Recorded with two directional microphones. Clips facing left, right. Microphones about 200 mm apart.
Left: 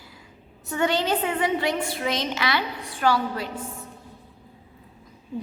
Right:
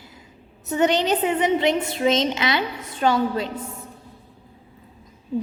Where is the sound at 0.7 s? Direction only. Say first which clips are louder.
Right 4 dB; 20° right (ahead or behind).